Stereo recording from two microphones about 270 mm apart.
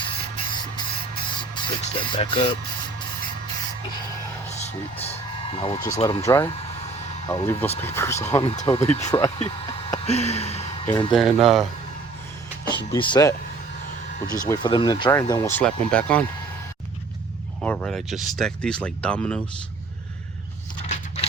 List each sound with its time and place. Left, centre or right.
0.5 s a sound: centre
1.4 s speech: centre
4.4 s speech: left
8.4 s speech: left
11.1 s speech: centre
12.7 s speech: centre
14.4 s speech: centre
17.6 s speech: centre
20.8 s scrape: left